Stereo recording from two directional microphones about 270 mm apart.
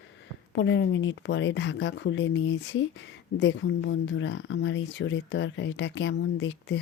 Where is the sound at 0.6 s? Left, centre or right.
Left.